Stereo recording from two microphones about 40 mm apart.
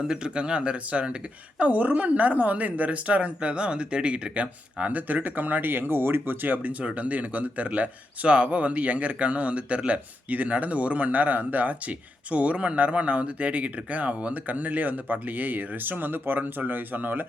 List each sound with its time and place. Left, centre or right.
0.0 s speech: right
1.5 s a man's voice: right